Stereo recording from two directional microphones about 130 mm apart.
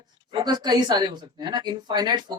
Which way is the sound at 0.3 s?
35° right (ahead or behind).